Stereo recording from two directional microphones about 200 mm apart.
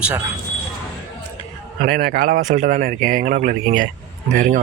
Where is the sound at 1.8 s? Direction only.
45° right (ahead or behind).